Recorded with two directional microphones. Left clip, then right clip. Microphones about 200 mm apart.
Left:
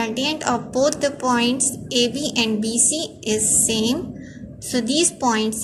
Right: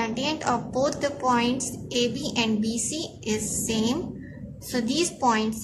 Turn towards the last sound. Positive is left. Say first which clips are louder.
# left 3 dB
turn(degrees=10)  # may be behind; listen again after turning